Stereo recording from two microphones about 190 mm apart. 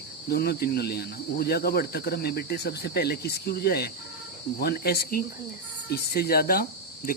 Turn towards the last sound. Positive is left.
turn(degrees=50)  # may be behind; listen again after turning